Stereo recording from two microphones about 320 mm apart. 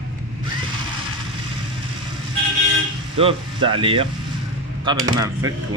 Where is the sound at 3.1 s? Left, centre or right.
Centre.